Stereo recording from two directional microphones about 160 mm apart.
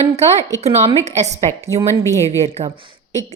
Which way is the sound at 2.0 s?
20° left (ahead or behind).